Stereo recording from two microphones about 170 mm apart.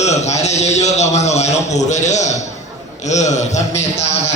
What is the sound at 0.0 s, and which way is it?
A man's voice, 40° left (ahead or behind).